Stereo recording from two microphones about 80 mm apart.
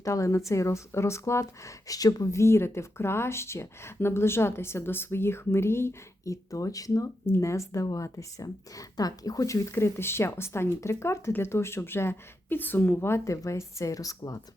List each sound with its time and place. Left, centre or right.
0.0 s speech: left
7.3 s speech: left